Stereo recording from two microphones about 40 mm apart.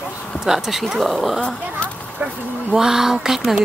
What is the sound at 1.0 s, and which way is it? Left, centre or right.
Speech, centre.